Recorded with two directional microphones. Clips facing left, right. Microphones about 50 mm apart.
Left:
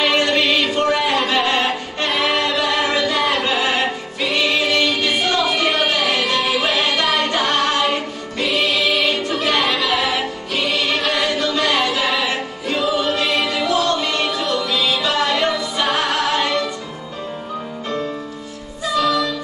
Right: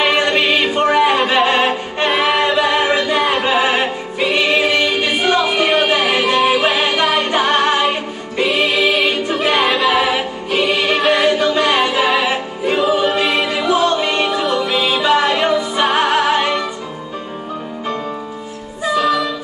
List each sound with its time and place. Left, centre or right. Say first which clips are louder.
0.0 s music: right 2 dB; right
18.9 s music: right 2 dB; right